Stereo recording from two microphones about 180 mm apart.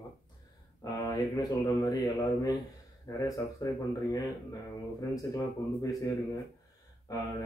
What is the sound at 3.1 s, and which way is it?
Speech, 20° left (ahead or behind).